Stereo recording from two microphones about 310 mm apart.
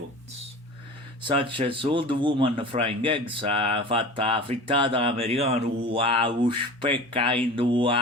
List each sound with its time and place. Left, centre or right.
1.2 s speech: centre